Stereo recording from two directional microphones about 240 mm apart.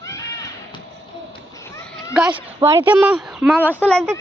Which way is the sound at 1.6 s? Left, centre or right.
Centre.